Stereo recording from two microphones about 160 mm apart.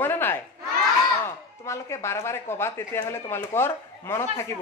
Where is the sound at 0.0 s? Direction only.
15° left (ahead or behind).